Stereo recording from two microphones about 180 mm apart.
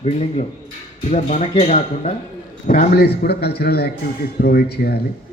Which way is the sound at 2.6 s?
55° left (ahead or behind).